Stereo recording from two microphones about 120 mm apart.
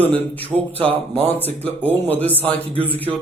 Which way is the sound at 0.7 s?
55° right (ahead or behind).